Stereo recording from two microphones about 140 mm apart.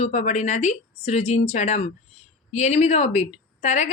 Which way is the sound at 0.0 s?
55° left (ahead or behind).